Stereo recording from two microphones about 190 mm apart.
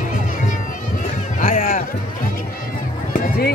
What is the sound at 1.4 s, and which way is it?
Music, 45° left (ahead or behind).